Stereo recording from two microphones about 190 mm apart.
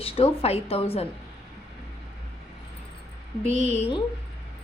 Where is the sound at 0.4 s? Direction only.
30° left (ahead or behind).